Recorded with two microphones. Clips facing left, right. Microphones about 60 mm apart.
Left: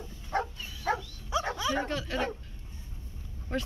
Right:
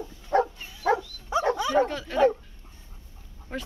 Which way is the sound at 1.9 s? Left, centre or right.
Centre.